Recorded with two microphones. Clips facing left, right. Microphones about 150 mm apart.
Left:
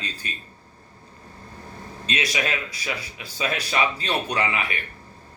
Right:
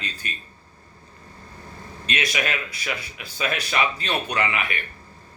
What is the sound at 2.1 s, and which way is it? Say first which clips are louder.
A man's voice: even; 30° left (ahead or behind).